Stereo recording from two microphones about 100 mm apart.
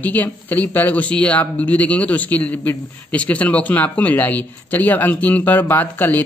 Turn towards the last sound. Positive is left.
turn(degrees=15)  # may be behind; listen again after turning